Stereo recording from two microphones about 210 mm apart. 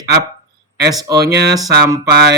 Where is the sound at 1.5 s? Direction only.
15° right (ahead or behind).